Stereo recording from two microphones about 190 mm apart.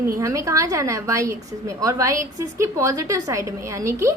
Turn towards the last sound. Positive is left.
turn(degrees=-15)  # may be behind; listen again after turning